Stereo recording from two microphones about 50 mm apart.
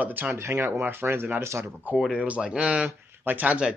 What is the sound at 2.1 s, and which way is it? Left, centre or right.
Speech, right.